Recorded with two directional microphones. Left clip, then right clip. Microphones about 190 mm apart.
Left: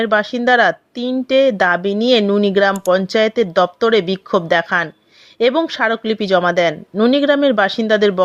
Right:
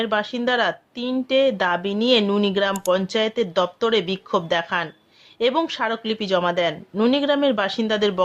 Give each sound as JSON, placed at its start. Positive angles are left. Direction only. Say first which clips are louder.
{"t": 0.0, "sound": "a woman's voice", "louder": "left 7 dB", "side_deg": 25}